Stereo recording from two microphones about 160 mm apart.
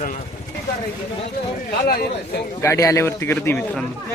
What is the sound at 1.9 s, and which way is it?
Speech, 75° left (ahead or behind).